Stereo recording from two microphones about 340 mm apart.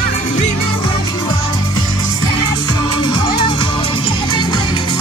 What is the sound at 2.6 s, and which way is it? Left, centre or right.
Music, centre.